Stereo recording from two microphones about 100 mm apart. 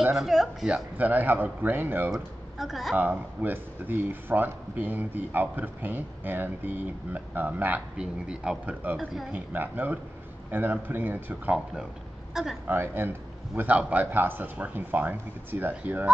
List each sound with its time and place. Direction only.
0.0 s speech: 5° right (ahead or behind)
0.9 s speech: 20° right (ahead or behind)
2.0 s speech: centre (ahead or behind)
3.0 s speech: 15° right (ahead or behind); by 9.3 s centre (ahead or behind)
9.3 s speech: 20° right (ahead or behind)
12.6 s speech: 20° right (ahead or behind)